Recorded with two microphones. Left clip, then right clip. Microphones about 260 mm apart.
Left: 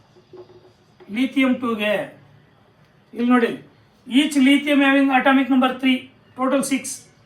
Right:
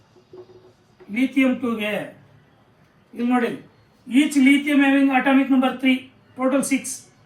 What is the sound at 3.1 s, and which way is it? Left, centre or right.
Speech, centre.